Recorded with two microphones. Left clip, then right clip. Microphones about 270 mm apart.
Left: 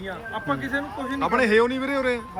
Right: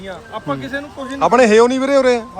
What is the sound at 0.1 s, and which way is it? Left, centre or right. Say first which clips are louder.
A man's voice: right 4 dB; centre.